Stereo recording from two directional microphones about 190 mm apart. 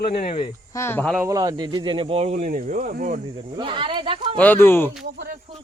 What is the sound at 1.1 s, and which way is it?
Speech, 15° right (ahead or behind).